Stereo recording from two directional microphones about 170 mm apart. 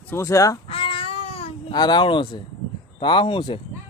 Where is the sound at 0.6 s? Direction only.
30° left (ahead or behind).